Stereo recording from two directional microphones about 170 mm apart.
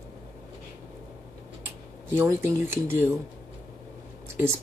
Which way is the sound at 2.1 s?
15° right (ahead or behind).